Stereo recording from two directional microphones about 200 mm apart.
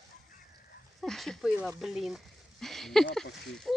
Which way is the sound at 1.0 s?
Centre (ahead or behind).